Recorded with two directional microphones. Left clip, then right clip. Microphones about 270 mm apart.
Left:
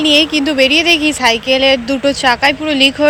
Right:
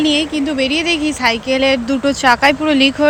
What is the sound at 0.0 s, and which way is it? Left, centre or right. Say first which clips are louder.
Speech: left 5 dB; centre.